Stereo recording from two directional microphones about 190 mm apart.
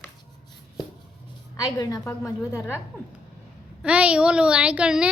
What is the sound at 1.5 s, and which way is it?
Speech, 20° left (ahead or behind).